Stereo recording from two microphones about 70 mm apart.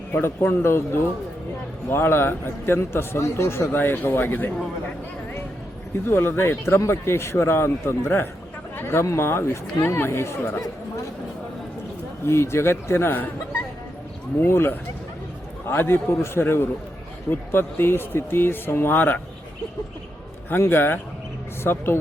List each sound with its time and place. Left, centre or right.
0.1 s a man's voice: left
6.1 s a man's voice: left
12.2 s a man's voice: left
20.5 s a man's voice: left